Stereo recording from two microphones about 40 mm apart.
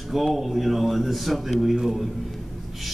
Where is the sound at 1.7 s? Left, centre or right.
Centre.